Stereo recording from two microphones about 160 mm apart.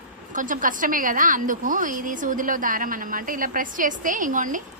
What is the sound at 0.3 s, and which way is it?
A woman's voice, 55° right (ahead or behind).